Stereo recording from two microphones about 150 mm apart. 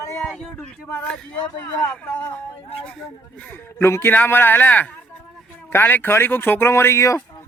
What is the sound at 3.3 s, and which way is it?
Speech, 10° left (ahead or behind).